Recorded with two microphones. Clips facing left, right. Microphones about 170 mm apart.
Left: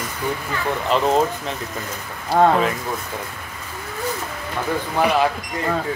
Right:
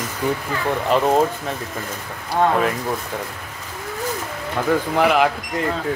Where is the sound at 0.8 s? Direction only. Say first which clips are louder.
Right 1 dB; 10° right (ahead or behind).